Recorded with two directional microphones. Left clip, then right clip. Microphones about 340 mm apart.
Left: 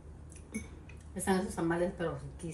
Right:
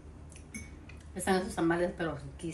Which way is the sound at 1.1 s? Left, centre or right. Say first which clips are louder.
Right 2 dB; centre.